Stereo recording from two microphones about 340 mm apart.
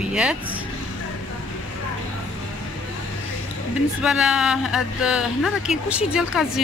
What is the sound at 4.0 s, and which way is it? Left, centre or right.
Speech, centre.